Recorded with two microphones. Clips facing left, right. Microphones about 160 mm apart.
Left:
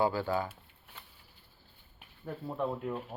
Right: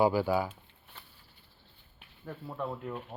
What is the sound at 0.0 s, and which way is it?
Speech, 15° right (ahead or behind).